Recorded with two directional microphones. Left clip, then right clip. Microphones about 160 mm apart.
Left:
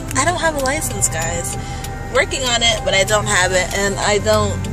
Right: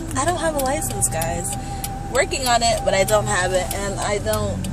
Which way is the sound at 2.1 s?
15° right (ahead or behind).